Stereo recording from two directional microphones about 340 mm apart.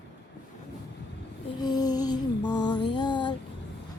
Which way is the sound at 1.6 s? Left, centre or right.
Centre.